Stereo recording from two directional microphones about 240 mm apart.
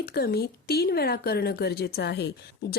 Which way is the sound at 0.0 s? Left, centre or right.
Left.